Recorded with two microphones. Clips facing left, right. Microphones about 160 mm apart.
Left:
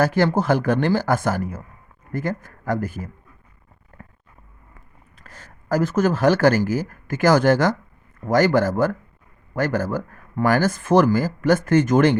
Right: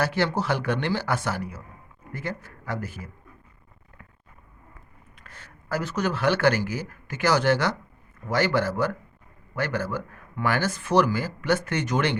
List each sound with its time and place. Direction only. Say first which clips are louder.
0.0 s speech: left 6 dB; 45° left (ahead or behind)
3.9 s a sound: left 7 dB; 45° left (ahead or behind)
5.2 s speech: left 4 dB; 40° left (ahead or behind)